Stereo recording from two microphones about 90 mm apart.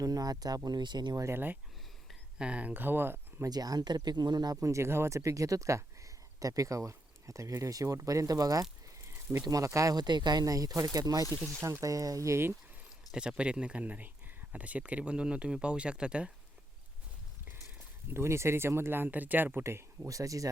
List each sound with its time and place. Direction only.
0.0 s speech: 45° right (ahead or behind)
1.2 s speech: 25° right (ahead or behind)
2.4 s speech: 15° right (ahead or behind)
3.4 s speech: 45° right (ahead or behind)
4.6 s speech: 30° right (ahead or behind)
9.0 s a sound: 30° right (ahead or behind)
9.4 s speech: 40° right (ahead or behind)
13.1 s speech: 10° right (ahead or behind)
17.5 s speech: 25° right (ahead or behind)